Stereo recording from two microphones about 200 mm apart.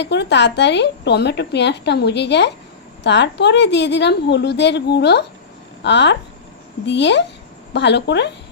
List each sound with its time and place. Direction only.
0.0 s speech: 60° left (ahead or behind)